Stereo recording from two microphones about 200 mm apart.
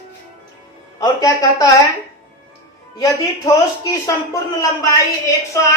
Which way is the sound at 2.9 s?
15° left (ahead or behind).